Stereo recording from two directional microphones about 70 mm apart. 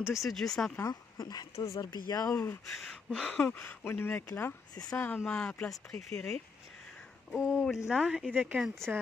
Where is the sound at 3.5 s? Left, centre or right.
Left.